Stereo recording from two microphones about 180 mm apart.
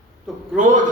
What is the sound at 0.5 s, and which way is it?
Speech, 45° right (ahead or behind).